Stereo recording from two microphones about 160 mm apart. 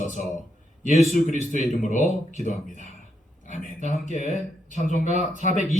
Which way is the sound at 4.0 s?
50° left (ahead or behind).